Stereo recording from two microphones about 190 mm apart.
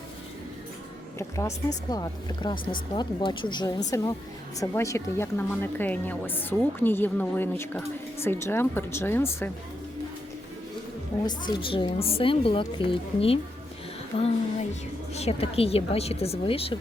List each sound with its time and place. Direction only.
1.4 s a woman's voice: 20° left (ahead or behind)
11.3 s a woman's voice: 25° left (ahead or behind)